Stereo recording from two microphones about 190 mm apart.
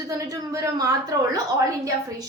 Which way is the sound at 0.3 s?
15° right (ahead or behind).